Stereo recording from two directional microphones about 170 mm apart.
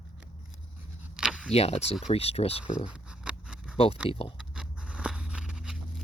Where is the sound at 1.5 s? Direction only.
35° left (ahead or behind).